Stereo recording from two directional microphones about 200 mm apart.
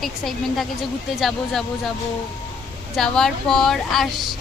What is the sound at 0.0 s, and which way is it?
A woman's voice, centre (ahead or behind).